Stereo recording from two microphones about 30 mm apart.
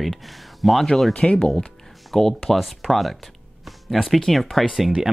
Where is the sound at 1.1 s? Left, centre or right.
Left.